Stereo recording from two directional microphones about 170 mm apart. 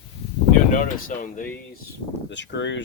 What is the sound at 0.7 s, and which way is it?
Speech, 50° left (ahead or behind).